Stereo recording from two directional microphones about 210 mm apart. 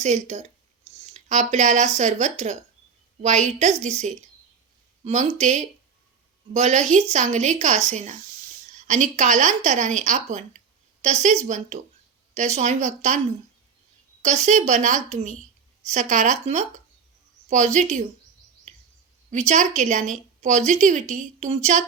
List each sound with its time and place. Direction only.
0.0 s a woman's voice: 30° right (ahead or behind)
14.2 s a woman's voice: 35° right (ahead or behind)
19.3 s a woman's voice: 35° right (ahead or behind)